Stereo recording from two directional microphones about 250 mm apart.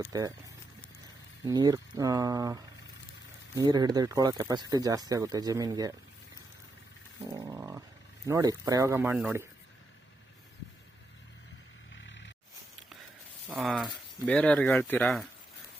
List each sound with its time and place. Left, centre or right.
0.1 s speech: centre
1.5 s speech: centre
7.3 s a sound: centre
8.3 s speech: centre
11.9 s a sound: left
13.5 s speech: centre